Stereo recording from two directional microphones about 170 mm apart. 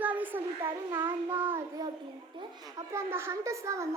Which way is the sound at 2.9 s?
15° right (ahead or behind).